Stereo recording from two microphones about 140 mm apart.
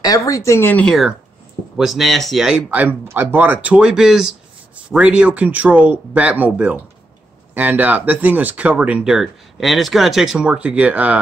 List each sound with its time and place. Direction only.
0.0 s speech: 25° left (ahead or behind)
1.8 s speech: centre (ahead or behind)